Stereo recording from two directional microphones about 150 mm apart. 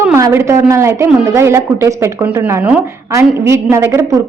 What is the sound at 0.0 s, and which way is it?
A woman's voice, 15° right (ahead or behind).